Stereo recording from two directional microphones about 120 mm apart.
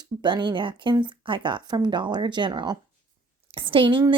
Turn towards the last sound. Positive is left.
turn(degrees=-45)  # may be behind; listen again after turning